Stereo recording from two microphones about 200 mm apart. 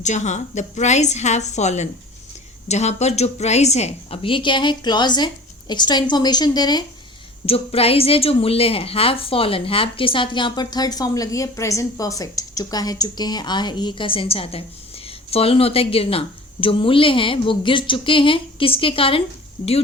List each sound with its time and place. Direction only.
0.0 s a woman's voice: 35° left (ahead or behind)